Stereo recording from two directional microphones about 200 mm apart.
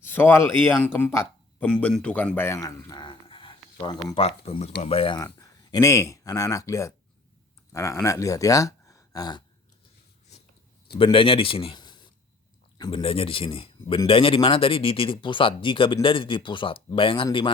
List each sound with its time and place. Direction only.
0.0 s speech: 10° left (ahead or behind)
10.9 s a man's voice: 25° left (ahead or behind)